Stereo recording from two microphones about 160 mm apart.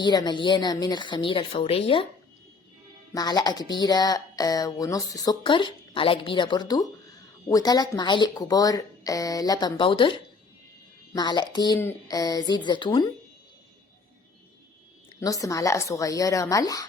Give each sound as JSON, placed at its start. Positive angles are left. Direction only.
{"t": 0.0, "sound": "speech", "side_deg": 25}
{"t": 3.1, "sound": "speech", "side_deg": 25}
{"t": 15.2, "sound": "speech", "side_deg": 20}